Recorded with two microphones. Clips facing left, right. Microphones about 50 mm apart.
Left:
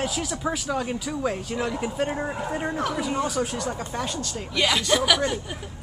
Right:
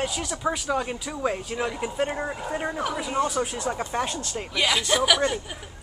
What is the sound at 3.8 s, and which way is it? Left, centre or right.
Speech, right.